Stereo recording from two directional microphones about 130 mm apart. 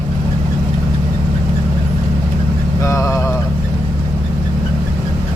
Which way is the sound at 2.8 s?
25° left (ahead or behind).